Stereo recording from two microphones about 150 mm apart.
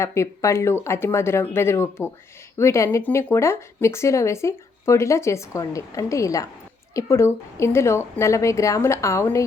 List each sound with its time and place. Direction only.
0.0 s speech: 20° left (ahead or behind)